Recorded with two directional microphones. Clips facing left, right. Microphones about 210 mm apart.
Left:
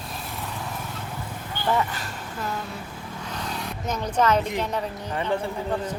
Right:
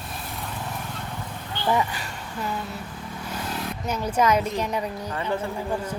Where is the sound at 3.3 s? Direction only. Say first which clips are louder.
Right 2 dB; 5° right (ahead or behind).